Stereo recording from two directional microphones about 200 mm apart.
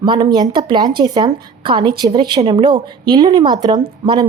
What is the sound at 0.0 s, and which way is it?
Speech, 20° right (ahead or behind).